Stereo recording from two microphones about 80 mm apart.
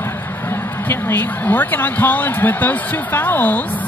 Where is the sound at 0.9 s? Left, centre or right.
Left.